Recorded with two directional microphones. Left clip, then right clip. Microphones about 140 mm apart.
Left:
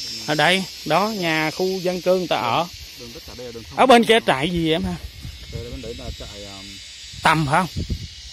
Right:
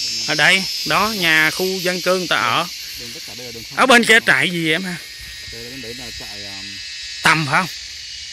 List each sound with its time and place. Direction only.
0.3 s speech: 25° left (ahead or behind)
0.8 s speech: 5° left (ahead or behind)
1.2 s cricket: centre (ahead or behind)
1.5 s cricket: 20° right (ahead or behind)
1.8 s cricket: 5° right (ahead or behind)
3.7 s speech: 10° left (ahead or behind)
7.2 s speech: 15° left (ahead or behind)